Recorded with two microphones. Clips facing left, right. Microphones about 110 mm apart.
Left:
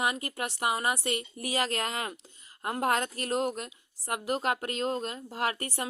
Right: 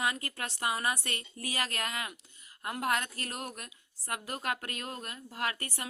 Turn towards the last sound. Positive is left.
turn(degrees=25)  # may be behind; listen again after turning